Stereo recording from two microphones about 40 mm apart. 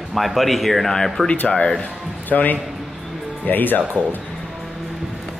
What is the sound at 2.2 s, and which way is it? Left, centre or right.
A man's voice, left.